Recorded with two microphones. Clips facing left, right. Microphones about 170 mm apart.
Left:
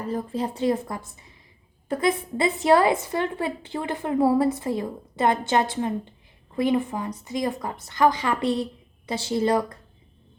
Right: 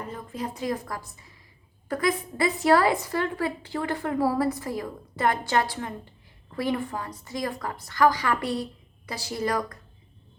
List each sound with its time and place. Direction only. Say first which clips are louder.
0.1 s a woman's voice: left 7 dB; 35° left (ahead or behind)